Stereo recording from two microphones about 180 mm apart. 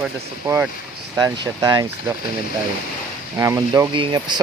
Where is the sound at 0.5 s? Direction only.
20° right (ahead or behind).